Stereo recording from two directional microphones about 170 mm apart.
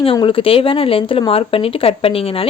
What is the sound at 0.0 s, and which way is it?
Speech, 30° left (ahead or behind).